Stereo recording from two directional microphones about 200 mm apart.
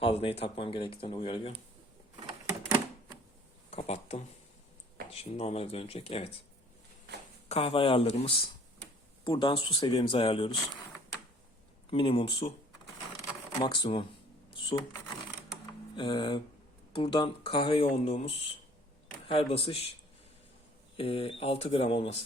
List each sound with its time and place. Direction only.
0.0 s speech: 30° left (ahead or behind)
3.7 s speech: 30° left (ahead or behind)
7.4 s speech: 30° left (ahead or behind)
11.9 s speech: 25° left (ahead or behind)
13.6 s speech: 25° left (ahead or behind)
14.5 s a sound: 25° left (ahead or behind)
16.0 s speech: 25° left (ahead or behind)
20.9 s speech: 30° left (ahead or behind)